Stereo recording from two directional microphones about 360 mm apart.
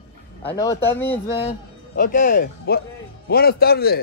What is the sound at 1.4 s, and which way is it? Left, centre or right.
Speech, centre.